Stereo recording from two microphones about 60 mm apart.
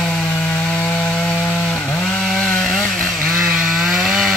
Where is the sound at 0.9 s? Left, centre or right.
Left.